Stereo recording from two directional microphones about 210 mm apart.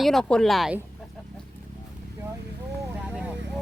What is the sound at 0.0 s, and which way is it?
Speech, centre (ahead or behind).